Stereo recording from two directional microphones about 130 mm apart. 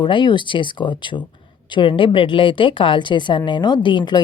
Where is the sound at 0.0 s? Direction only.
40° left (ahead or behind).